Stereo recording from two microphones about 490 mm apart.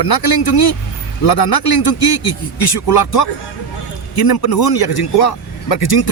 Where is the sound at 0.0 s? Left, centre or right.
Left.